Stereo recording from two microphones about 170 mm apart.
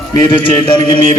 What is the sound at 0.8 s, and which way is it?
Mantra, 30° left (ahead or behind).